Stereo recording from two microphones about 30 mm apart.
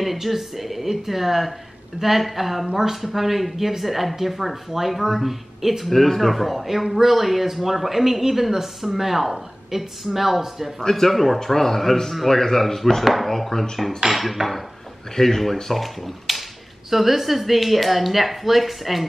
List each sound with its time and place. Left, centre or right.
0.0 s speech: centre
10.8 s speech: centre
14.1 s speech: centre
15.1 s speech: centre